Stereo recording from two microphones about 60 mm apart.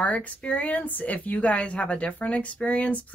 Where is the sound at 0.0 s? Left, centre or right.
Left.